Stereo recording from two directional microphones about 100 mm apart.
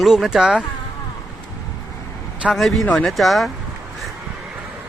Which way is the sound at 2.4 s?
Centre (ahead or behind).